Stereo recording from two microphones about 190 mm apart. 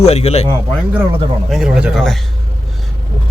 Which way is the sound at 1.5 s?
Centre (ahead or behind).